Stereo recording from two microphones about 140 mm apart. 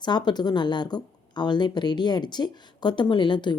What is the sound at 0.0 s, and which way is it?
Speech, 30° left (ahead or behind).